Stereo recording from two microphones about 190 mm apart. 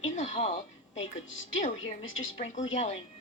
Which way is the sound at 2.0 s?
90° left.